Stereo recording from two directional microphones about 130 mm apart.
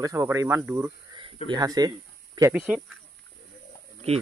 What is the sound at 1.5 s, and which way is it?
Speech, 30° right (ahead or behind).